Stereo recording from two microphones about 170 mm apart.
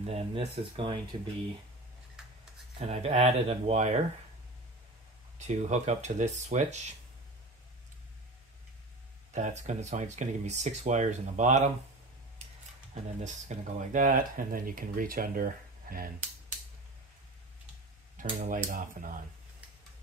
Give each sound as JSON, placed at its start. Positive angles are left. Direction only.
{"t": 0.0, "sound": "speech", "side_deg": -35}
{"t": 2.9, "sound": "speech", "side_deg": -40}
{"t": 5.4, "sound": "speech", "side_deg": -45}
{"t": 9.3, "sound": "speech", "side_deg": -45}
{"t": 13.2, "sound": "speech", "side_deg": -45}
{"t": 18.1, "sound": "speech", "side_deg": -50}